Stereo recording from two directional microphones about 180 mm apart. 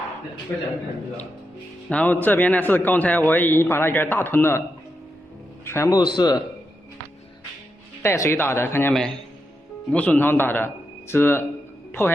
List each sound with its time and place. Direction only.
0.5 s a man's voice: 10° left (ahead or behind)
1.9 s a man's voice: 10° left (ahead or behind)
5.6 s a man's voice: 15° left (ahead or behind)
8.0 s a man's voice: 15° left (ahead or behind)
8.9 s a man's voice: centre (ahead or behind)
11.9 s music: 10° left (ahead or behind)